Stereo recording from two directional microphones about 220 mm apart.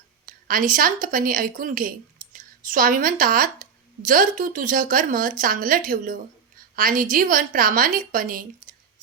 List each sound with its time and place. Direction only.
0.3 s a woman's voice: 40° right (ahead or behind)